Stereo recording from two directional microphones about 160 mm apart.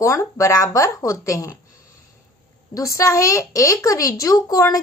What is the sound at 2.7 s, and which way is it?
Speech, 20° left (ahead or behind).